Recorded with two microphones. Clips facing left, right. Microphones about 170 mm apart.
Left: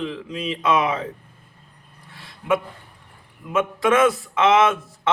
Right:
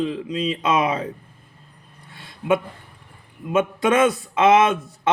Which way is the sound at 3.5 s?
25° right (ahead or behind).